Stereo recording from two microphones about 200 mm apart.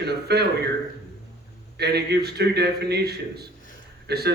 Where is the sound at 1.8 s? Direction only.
55° right (ahead or behind).